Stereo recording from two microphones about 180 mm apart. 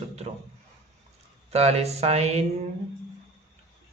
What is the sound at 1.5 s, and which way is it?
Speech, 35° right (ahead or behind).